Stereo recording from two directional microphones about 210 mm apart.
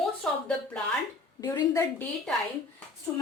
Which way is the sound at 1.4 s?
15° left (ahead or behind).